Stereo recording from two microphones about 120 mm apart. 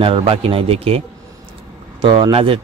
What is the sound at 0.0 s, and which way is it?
Speech, 50° right (ahead or behind).